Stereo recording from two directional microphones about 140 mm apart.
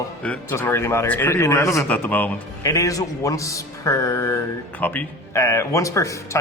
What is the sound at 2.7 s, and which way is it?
A man's voice, 25° left (ahead or behind).